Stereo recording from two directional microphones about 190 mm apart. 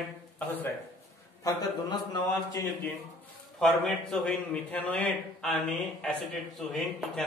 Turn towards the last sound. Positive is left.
turn(degrees=0)  # may be behind; listen again after turning